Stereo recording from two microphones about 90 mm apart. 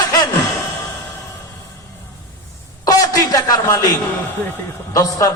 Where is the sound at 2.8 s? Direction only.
40° left (ahead or behind).